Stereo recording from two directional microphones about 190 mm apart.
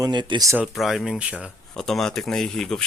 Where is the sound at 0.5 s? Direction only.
5° right (ahead or behind).